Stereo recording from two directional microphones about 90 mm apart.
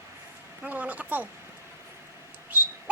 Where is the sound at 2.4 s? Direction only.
20° right (ahead or behind).